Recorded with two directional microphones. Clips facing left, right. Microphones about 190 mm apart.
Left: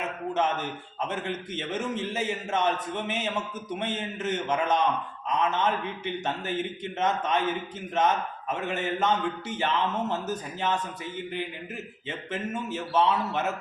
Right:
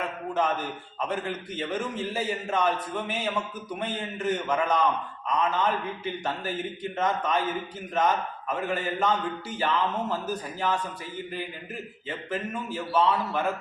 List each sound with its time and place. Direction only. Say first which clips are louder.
0.0 s a sound: even; 25° left (ahead or behind)
1.0 s a man's voice: right 1 dB; 25° left (ahead or behind)
12.0 s a man's voice: right 1 dB; 25° left (ahead or behind)